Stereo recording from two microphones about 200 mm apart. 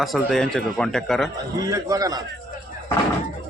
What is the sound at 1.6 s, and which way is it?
Speech, 15° right (ahead or behind).